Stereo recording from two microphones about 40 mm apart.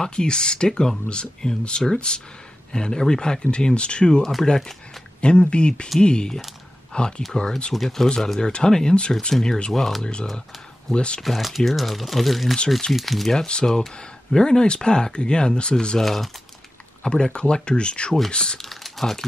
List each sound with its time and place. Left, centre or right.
0.0 s speech: left
5.2 s speech: left
7.7 s speech: centre; by 9.1 s left
9.3 s speech: centre
10.9 s speech: left
11.1 s speech: centre
13.5 s speech: centre
16.0 s speech: centre
17.0 s speech: left
18.6 s typing: centre